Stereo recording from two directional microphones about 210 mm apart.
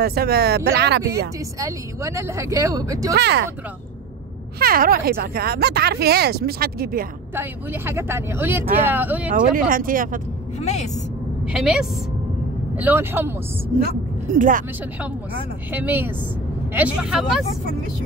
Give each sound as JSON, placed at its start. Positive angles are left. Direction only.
{"t": 0.0, "sound": "speech", "side_deg": -50}
{"t": 1.6, "sound": "speech", "side_deg": -15}
{"t": 3.2, "sound": "speech", "side_deg": -55}
{"t": 4.6, "sound": "speech", "side_deg": -45}
{"t": 7.3, "sound": "speech", "side_deg": -10}
{"t": 9.3, "sound": "speech", "side_deg": -40}
{"t": 10.6, "sound": "a woman's voice", "side_deg": 30}
{"t": 11.4, "sound": "speech", "side_deg": -5}
{"t": 14.3, "sound": "speech", "side_deg": -40}
{"t": 15.7, "sound": "speech", "side_deg": -10}